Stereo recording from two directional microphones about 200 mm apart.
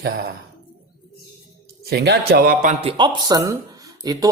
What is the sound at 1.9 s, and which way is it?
Speech, 55° right (ahead or behind).